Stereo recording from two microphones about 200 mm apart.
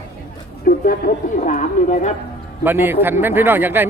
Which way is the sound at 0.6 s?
45° left (ahead or behind).